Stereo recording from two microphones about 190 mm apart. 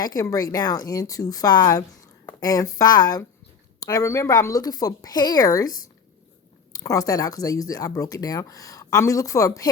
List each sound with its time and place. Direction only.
0.0 s speech: 20° left (ahead or behind)